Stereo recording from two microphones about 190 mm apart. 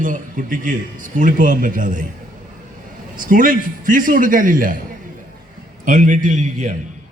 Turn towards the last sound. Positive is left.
turn(degrees=-40)  # may be behind; listen again after turning